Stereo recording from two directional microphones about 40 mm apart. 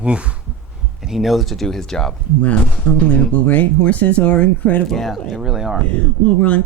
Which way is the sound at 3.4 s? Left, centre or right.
Left.